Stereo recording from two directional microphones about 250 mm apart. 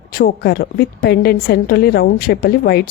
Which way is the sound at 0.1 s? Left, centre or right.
Left.